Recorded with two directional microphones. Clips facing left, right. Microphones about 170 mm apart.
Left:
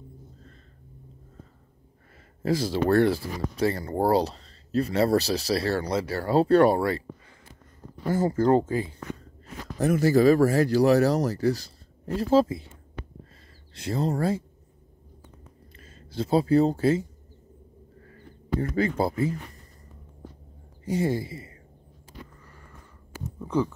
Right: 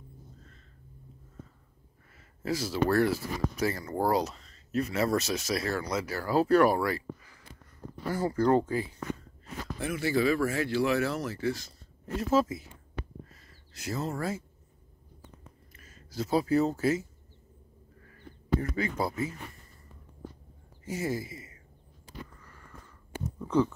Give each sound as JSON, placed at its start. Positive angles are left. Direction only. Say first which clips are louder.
{"t": 2.4, "sound": "speech", "louder": "left 4 dB", "side_deg": 30}
{"t": 9.8, "sound": "speech", "louder": "left 8 dB", "side_deg": 40}
{"t": 13.7, "sound": "speech", "louder": "left 6 dB", "side_deg": 30}
{"t": 15.7, "sound": "speech", "louder": "left 5 dB", "side_deg": 30}
{"t": 18.0, "sound": "a sound", "louder": "even", "side_deg": 30}
{"t": 20.8, "sound": "speech", "louder": "left 6 dB", "side_deg": 30}
{"t": 23.4, "sound": "a sound", "louder": "even", "side_deg": 10}